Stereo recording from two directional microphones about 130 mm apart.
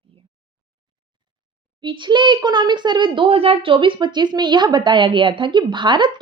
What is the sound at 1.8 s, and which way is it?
A child's voice, 40° right (ahead or behind).